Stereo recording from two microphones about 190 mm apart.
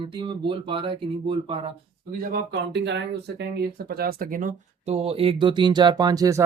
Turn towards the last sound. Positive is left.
turn(degrees=-15)  # may be behind; listen again after turning